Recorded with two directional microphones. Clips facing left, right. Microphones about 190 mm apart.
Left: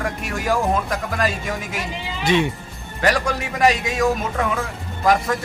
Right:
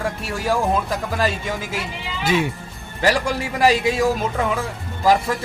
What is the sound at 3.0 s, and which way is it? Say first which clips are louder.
Speech: right 1 dB; 30° right (ahead or behind).